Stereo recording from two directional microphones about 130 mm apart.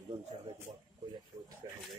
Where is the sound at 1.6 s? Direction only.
30° right (ahead or behind).